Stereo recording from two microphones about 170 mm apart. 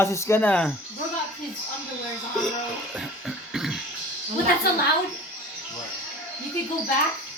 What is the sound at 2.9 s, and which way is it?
Music, 5° right (ahead or behind).